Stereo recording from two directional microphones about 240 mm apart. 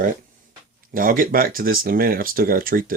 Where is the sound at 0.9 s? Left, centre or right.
Right.